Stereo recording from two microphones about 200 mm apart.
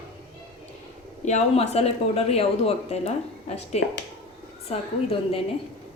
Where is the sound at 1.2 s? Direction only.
35° left (ahead or behind).